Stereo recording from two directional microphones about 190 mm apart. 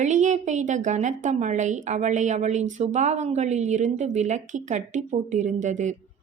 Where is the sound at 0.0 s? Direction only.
40° right (ahead or behind).